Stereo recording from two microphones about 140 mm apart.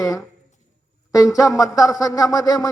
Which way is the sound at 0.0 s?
25° left (ahead or behind).